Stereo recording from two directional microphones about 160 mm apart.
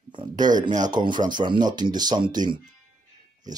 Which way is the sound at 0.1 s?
30° right (ahead or behind).